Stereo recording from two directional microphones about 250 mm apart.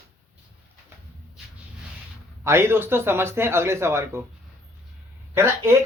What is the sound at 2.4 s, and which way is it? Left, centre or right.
Speech, centre.